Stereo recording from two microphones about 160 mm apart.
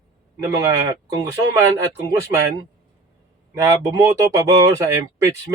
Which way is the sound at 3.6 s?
20° right (ahead or behind).